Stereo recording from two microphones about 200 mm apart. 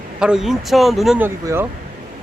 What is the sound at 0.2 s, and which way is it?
Speech, 5° right (ahead or behind).